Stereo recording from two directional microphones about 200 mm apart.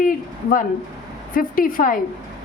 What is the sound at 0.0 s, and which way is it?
A woman's voice, 45° left (ahead or behind).